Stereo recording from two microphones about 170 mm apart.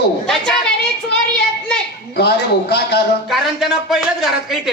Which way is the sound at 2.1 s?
70° left (ahead or behind).